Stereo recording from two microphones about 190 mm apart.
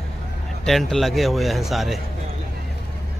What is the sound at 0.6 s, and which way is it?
Speech, centre (ahead or behind).